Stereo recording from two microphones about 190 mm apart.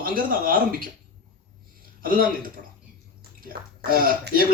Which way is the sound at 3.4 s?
50° right (ahead or behind).